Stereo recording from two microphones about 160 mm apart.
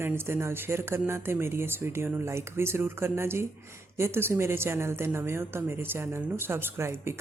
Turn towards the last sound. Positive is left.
turn(degrees=-15)  # may be behind; listen again after turning